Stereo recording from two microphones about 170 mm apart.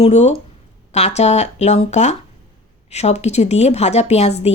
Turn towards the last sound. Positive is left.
turn(degrees=40)  # may be behind; listen again after turning